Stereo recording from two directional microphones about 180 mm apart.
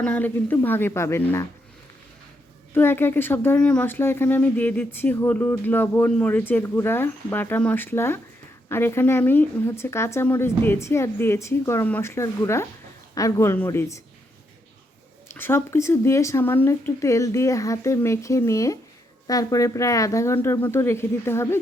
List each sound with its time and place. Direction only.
0.0 s speech: 10° left (ahead or behind)
2.7 s speech: 10° left (ahead or behind)
15.3 s speech: 15° left (ahead or behind)